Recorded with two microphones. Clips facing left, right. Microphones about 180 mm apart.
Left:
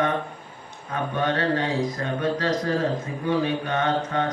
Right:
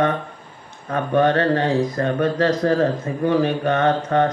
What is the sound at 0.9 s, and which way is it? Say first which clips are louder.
Speech: right 8 dB; 55° right (ahead or behind).